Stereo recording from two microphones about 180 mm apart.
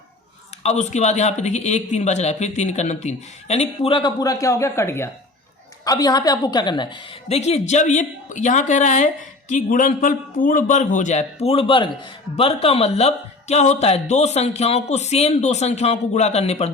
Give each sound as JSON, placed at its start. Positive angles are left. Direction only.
{"t": 0.6, "sound": "a man's voice", "side_deg": 40}
{"t": 7.3, "sound": "a man's voice", "side_deg": 35}